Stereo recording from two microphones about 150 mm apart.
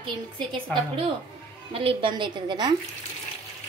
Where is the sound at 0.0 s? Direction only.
35° right (ahead or behind).